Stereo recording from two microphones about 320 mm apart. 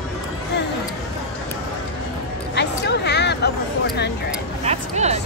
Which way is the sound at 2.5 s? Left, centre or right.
Left.